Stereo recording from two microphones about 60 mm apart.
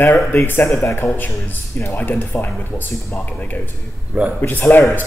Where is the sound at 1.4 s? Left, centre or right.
Left.